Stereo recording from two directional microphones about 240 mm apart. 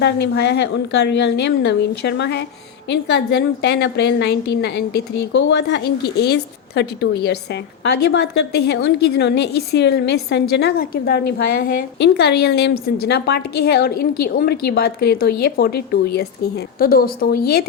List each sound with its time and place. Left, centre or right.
0.0 s a woman's voice: left
16.8 s a woman's voice: left